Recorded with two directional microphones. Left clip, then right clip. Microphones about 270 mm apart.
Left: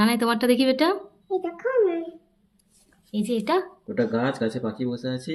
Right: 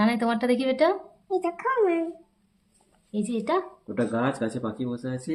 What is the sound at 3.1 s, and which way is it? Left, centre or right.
Speech, centre.